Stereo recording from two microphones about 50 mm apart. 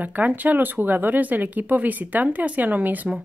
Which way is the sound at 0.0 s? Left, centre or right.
Right.